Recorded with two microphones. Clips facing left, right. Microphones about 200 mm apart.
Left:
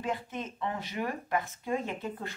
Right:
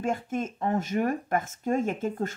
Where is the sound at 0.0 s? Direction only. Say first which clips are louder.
Right 6 dB; 50° right (ahead or behind).